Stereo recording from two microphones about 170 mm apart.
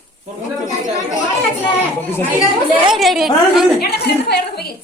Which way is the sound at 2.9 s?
Centre (ahead or behind).